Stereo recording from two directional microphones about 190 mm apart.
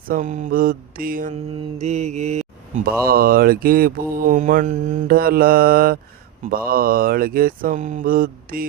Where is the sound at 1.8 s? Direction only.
35° right (ahead or behind).